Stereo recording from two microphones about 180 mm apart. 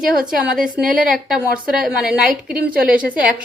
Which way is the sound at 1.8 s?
Centre (ahead or behind).